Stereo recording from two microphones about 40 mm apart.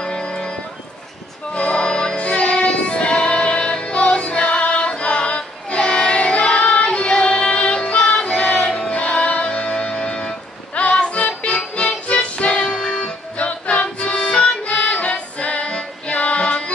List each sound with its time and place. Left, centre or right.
0.0 s music: left
8.2 s child singing: left
8.6 s music: left